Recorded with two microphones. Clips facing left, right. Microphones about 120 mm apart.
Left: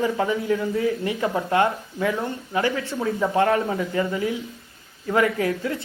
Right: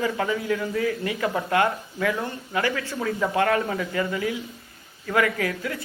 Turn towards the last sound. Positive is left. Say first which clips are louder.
# left 3 dB
turn(degrees=25)  # may be behind; listen again after turning